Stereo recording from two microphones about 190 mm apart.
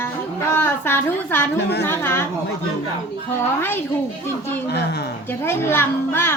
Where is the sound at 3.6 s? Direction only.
10° left (ahead or behind).